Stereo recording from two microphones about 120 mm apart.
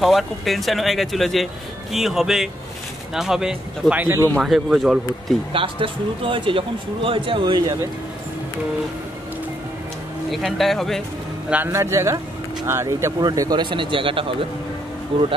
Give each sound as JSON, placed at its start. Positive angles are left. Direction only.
{"t": 0.0, "sound": "speech", "side_deg": 0}
{"t": 4.0, "sound": "a man's voice", "side_deg": -20}
{"t": 4.4, "sound": "speech", "side_deg": 0}
{"t": 5.5, "sound": "speech", "side_deg": -45}
{"t": 10.3, "sound": "speech", "side_deg": 0}
{"t": 11.5, "sound": "a man's voice", "side_deg": -20}